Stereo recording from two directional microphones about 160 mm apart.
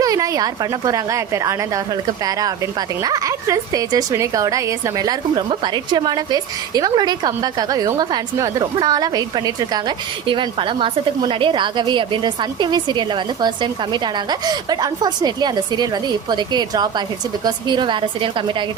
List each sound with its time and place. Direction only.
0.0 s a woman's voice: 20° right (ahead or behind)
3.0 s a woman's voice: 20° right (ahead or behind)